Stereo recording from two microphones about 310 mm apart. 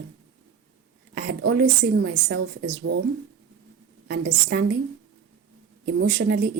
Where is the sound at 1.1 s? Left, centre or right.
Right.